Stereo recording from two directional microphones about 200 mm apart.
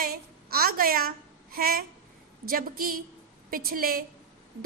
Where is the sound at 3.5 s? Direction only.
45° right (ahead or behind).